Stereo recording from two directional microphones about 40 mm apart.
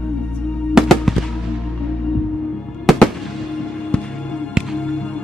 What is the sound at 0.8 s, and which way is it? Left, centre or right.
Music, centre.